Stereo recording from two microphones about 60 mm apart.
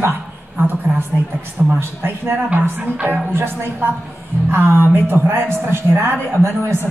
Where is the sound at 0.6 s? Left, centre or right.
Right.